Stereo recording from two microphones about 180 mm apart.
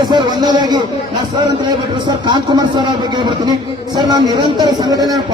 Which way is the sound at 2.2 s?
25° right (ahead or behind).